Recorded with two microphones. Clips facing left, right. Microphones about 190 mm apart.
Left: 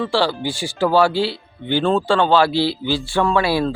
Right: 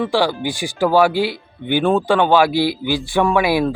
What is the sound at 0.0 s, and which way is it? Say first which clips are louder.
Speech: right 2 dB; 15° right (ahead or behind).